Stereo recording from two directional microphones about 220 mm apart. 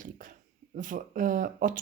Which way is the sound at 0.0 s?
35° right (ahead or behind).